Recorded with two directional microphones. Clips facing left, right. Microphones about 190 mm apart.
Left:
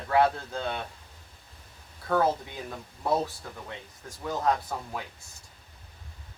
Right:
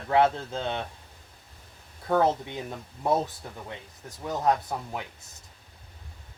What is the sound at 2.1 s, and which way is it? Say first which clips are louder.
Speech: right 2 dB; 20° right (ahead or behind).